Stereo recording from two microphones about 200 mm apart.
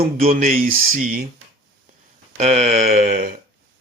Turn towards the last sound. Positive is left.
turn(degrees=-45)  # may be behind; listen again after turning